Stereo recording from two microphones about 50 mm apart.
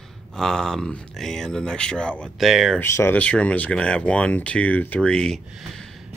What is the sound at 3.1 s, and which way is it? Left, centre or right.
Speech, left.